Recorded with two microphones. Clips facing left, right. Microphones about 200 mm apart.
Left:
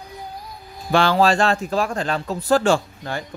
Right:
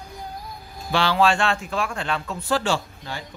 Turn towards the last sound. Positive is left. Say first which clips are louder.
# left 6 dB
turn(degrees=50)  # may be behind; listen again after turning